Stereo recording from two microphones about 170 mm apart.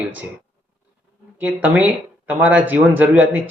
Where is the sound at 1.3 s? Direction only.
10° right (ahead or behind).